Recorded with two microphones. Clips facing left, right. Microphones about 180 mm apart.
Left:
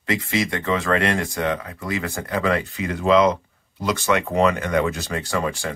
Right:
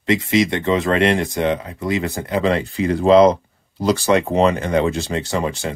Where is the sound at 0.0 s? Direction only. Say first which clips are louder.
Right 6 dB; 25° right (ahead or behind).